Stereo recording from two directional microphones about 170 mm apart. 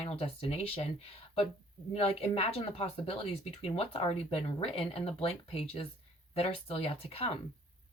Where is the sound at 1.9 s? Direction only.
35° left (ahead or behind).